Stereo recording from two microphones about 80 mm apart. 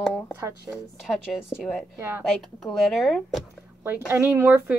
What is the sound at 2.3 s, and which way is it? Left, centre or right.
Speech, centre.